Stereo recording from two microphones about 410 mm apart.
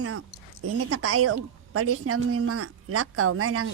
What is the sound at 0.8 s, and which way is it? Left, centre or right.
A woman's voice, right.